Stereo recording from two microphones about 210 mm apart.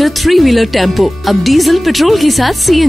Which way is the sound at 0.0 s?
Centre (ahead or behind).